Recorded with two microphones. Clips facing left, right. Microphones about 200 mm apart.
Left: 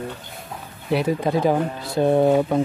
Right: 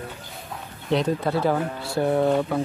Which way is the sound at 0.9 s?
10° left (ahead or behind).